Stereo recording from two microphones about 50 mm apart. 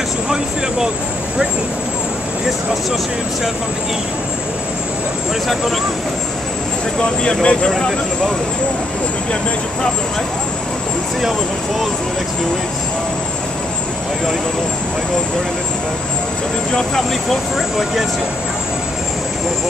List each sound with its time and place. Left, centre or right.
7.0 s speech: centre
16.7 s speech: centre
17.6 s speech: centre